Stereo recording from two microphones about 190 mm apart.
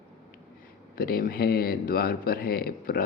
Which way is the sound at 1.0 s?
50° left (ahead or behind).